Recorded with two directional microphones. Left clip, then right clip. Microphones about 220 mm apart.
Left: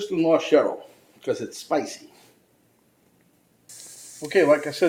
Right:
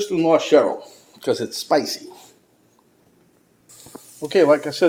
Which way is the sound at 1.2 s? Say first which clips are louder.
Right 5 dB; 30° right (ahead or behind).